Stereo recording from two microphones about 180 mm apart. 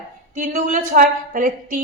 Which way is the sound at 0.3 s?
45° right (ahead or behind).